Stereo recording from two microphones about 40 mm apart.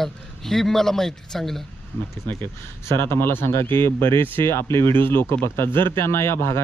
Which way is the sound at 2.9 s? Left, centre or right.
Left.